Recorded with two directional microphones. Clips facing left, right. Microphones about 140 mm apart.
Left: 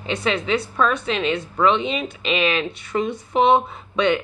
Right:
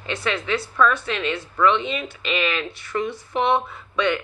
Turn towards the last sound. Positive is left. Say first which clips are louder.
# left 3 dB
turn(degrees=20)  # may be behind; listen again after turning